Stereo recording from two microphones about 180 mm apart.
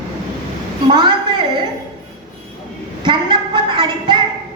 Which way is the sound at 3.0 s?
25° right (ahead or behind).